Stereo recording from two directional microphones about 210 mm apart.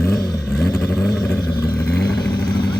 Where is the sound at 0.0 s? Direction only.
15° left (ahead or behind).